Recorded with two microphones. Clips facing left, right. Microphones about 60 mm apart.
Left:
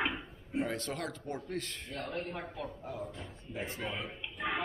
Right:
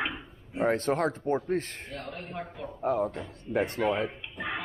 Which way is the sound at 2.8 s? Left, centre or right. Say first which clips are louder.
Right 13 dB; right.